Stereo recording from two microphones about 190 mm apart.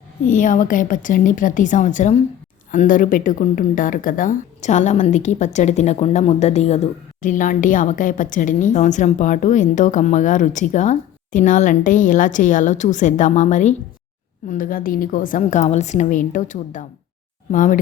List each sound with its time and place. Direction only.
0.3 s a woman's voice: 45° left (ahead or behind)